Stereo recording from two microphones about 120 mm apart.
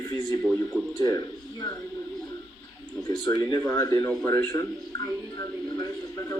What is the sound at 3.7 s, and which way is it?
Speech, 20° left (ahead or behind).